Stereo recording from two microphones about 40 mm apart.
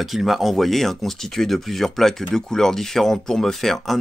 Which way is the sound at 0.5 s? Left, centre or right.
Centre.